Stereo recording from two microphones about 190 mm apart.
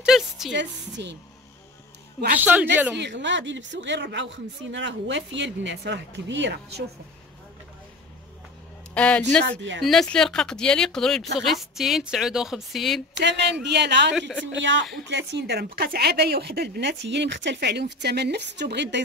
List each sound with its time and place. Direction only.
0.0 s a sound: centre (ahead or behind)
0.5 s speech: 70° right (ahead or behind)
2.4 s speech: 10° right (ahead or behind)
3.0 s speech: 70° right (ahead or behind)
8.9 s speech: 5° left (ahead or behind)
13.2 s speech: 65° right (ahead or behind)